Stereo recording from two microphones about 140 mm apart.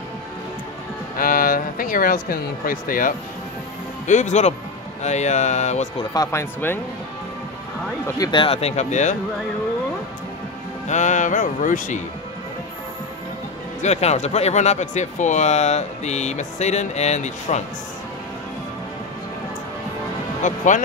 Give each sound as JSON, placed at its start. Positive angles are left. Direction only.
{"t": 1.1, "sound": "speech", "side_deg": 90}
{"t": 4.1, "sound": "speech", "side_deg": 60}
{"t": 6.1, "sound": "speech", "side_deg": 20}
{"t": 8.2, "sound": "speech", "side_deg": 35}
{"t": 10.9, "sound": "speech", "side_deg": 60}
{"t": 13.8, "sound": "speech", "side_deg": 55}
{"t": 20.4, "sound": "speech", "side_deg": 65}